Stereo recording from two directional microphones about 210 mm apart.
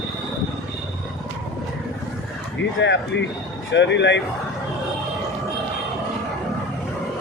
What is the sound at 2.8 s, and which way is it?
Speech, 55° left (ahead or behind).